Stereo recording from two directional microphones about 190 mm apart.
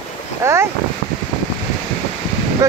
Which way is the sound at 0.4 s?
15° right (ahead or behind).